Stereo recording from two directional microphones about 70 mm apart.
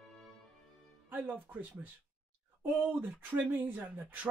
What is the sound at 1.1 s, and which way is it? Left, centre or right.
Speech, right.